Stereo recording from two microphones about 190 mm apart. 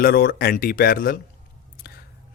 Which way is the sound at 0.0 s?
50° left (ahead or behind).